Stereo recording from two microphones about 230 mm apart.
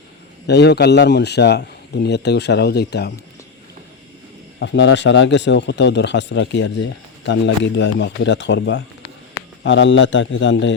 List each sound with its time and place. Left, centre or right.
0.4 s speech: left
4.6 s speech: left